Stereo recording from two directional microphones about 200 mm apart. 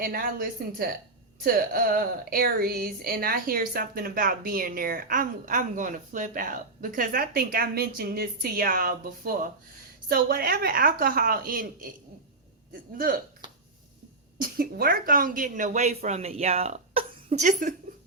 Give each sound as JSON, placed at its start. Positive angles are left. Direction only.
{"t": 0.0, "sound": "speech", "side_deg": -45}
{"t": 14.3, "sound": "speech", "side_deg": -45}
{"t": 17.2, "sound": "speech", "side_deg": -40}